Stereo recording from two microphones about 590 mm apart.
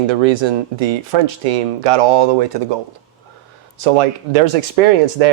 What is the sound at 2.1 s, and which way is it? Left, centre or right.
Speech, right.